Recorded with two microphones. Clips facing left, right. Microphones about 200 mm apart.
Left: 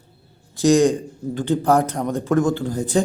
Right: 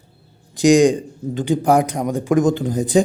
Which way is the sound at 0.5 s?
15° right (ahead or behind).